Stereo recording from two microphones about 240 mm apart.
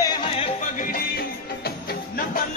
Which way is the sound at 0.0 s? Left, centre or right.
Centre.